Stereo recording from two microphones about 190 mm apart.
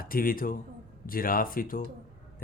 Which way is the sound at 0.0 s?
50° left (ahead or behind).